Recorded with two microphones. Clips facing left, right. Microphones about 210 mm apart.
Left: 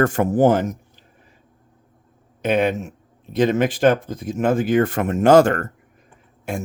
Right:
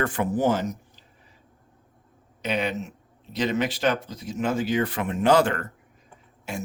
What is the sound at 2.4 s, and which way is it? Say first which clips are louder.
Speech: left 8 dB; 50° left (ahead or behind).